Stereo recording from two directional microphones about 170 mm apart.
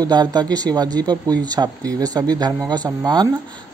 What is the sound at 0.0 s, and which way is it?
Speech, 25° right (ahead or behind).